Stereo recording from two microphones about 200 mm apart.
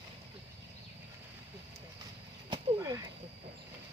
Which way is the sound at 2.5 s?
15° right (ahead or behind).